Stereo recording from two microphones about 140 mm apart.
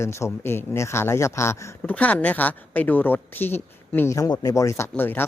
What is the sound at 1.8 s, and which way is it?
Speech, 10° left (ahead or behind).